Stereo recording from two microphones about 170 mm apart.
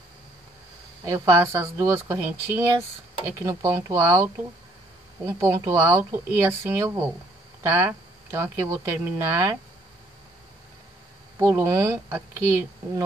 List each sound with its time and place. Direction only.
1.0 s speech: 15° right (ahead or behind)
11.3 s speech: 15° right (ahead or behind)